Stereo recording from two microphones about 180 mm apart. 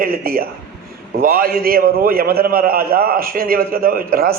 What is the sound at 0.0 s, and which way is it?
A man's voice, 55° right (ahead or behind).